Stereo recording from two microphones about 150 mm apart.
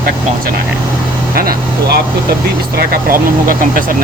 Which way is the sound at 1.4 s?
75° right (ahead or behind).